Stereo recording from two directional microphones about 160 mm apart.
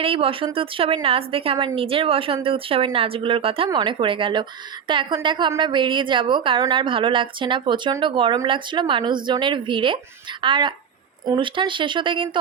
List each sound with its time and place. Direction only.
0.0 s a woman's voice: 35° right (ahead or behind)